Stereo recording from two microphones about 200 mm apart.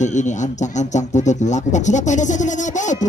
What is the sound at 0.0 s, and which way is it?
A man's voice, 35° left (ahead or behind).